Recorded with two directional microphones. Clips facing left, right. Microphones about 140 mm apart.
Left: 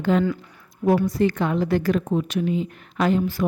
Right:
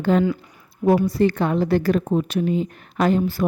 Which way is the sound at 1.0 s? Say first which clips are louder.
Right 2 dB; 30° right (ahead or behind).